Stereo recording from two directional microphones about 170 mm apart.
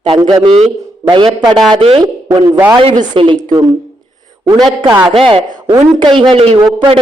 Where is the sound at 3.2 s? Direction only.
30° right (ahead or behind).